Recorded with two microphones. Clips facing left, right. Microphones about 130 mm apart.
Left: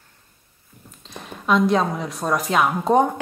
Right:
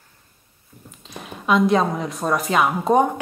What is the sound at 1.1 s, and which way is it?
A woman's voice, 5° right (ahead or behind).